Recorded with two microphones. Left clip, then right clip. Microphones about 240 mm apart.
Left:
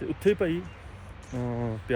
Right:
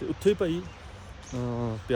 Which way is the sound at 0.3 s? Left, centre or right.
Centre.